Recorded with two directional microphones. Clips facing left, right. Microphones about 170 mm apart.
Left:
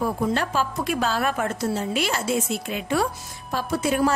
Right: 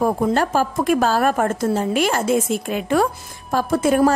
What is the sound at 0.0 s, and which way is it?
A woman's voice, 45° right (ahead or behind).